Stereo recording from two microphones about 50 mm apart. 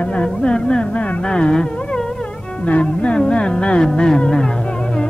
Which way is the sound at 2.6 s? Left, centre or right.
Left.